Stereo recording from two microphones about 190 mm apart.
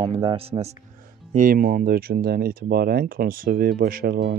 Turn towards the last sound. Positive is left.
turn(degrees=-50)  # may be behind; listen again after turning